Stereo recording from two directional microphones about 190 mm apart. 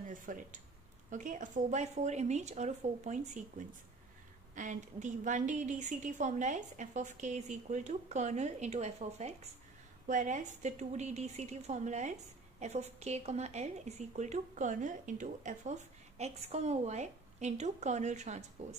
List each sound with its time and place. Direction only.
0.1 s a woman's voice: 45° right (ahead or behind)